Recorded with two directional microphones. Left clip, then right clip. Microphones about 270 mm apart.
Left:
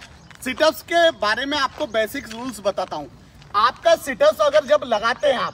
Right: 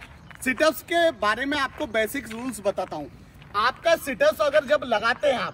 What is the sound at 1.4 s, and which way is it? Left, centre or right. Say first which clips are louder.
A man's voice: left 4 dB; centre.